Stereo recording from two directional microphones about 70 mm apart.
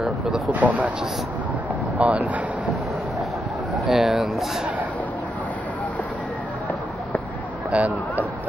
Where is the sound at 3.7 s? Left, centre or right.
Centre.